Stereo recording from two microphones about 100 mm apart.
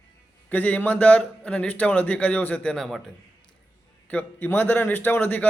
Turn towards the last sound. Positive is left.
turn(degrees=15)  # may be behind; listen again after turning